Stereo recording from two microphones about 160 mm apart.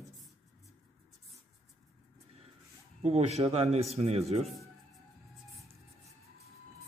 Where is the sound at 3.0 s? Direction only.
40° right (ahead or behind).